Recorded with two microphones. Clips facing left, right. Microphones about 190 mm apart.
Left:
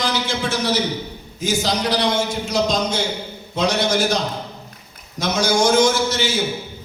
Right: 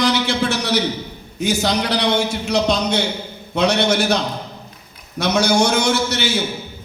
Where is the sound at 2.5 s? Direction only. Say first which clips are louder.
Right 2 dB; 65° right (ahead or behind).